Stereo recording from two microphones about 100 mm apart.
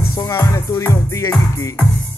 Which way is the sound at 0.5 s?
30° left (ahead or behind).